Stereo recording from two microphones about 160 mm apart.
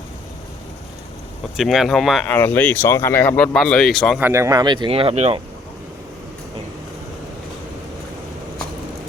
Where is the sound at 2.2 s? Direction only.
10° left (ahead or behind).